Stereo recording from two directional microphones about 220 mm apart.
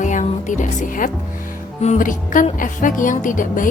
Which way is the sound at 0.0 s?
35° left (ahead or behind).